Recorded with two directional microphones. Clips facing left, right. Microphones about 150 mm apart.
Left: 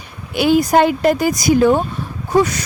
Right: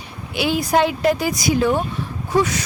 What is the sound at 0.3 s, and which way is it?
Speech, 45° left (ahead or behind).